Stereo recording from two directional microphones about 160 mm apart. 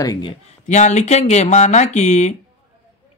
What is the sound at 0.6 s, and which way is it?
Speech, 50° left (ahead or behind).